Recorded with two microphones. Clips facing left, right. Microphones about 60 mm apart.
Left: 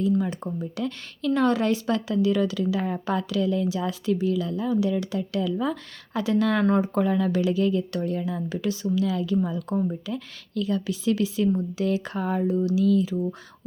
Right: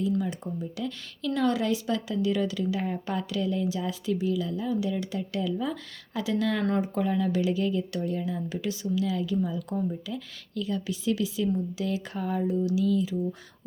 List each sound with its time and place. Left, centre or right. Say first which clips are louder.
0.2 s speech: left 3 dB; left
1.3 s speech: left 4 dB; left
6.1 s speech: left 5 dB; left
6.7 s speech: left 5 dB; left
6.9 s speech: left 3 dB; left